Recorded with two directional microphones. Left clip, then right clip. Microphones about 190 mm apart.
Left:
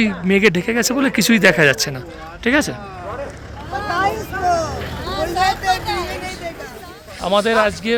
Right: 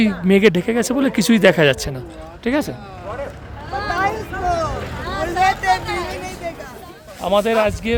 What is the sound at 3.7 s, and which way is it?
Vehicle, 55° left (ahead or behind).